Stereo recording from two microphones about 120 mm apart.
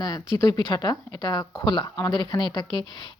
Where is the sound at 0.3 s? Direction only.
35° left (ahead or behind).